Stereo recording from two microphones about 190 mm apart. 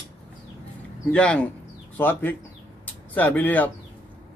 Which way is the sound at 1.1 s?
5° left (ahead or behind).